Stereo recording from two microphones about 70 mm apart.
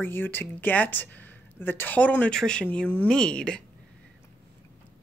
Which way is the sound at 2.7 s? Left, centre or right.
Left.